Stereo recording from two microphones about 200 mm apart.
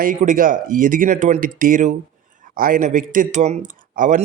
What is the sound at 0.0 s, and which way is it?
Speech, 40° right (ahead or behind).